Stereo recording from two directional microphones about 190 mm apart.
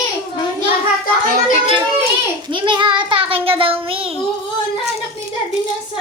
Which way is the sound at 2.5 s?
25° right (ahead or behind).